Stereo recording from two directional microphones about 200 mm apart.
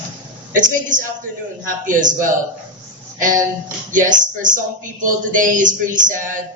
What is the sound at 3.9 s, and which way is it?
Speech, 40° right (ahead or behind).